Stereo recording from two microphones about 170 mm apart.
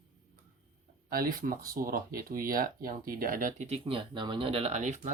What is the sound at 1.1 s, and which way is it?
Speech, 55° right (ahead or behind).